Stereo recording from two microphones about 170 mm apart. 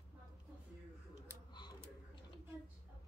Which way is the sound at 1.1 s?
25° left (ahead or behind).